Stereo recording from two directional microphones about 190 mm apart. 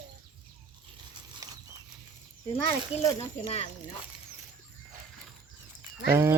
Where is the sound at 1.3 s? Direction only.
20° right (ahead or behind).